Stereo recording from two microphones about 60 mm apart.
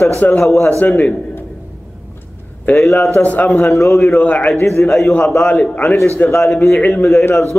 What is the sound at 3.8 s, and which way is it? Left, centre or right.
Speech, centre.